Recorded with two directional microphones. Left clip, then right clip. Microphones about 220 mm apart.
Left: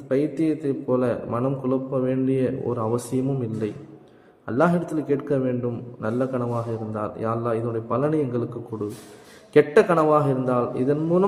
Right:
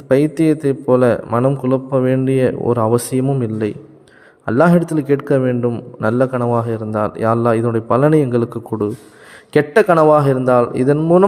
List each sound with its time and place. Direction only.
0.1 s a man's voice: 50° right (ahead or behind)